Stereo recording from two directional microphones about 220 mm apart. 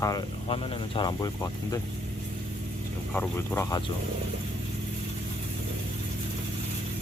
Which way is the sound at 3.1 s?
10° left (ahead or behind).